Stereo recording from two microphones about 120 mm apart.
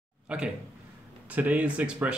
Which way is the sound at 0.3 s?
10° right (ahead or behind).